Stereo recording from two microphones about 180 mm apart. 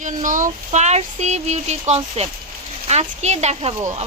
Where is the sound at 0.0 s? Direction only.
45° right (ahead or behind).